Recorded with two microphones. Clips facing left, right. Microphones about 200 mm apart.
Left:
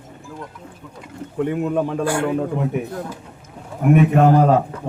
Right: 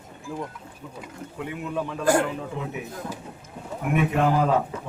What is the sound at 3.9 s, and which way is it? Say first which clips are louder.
Speech: left 8 dB; 50° left (ahead or behind).